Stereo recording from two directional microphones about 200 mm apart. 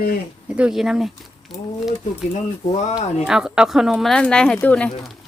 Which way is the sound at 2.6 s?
35° left (ahead or behind).